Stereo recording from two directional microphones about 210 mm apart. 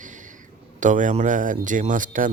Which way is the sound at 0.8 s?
35° right (ahead or behind).